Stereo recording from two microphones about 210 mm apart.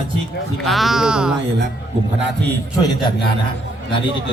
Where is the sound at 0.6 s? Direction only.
Centre (ahead or behind).